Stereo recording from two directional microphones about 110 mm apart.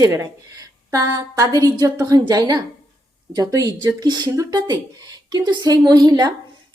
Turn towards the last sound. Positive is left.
turn(degrees=-40)  # may be behind; listen again after turning